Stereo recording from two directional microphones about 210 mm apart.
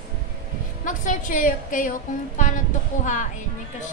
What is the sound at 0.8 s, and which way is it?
A woman's voice, 40° left (ahead or behind).